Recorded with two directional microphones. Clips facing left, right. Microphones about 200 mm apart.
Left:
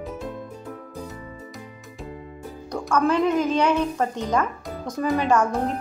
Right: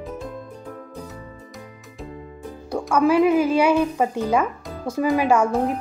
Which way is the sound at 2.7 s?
10° right (ahead or behind).